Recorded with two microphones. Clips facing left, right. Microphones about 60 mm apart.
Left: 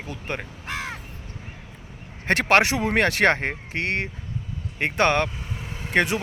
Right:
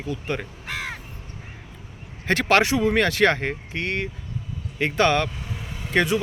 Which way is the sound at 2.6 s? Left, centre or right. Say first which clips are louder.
Right 1 dB; left.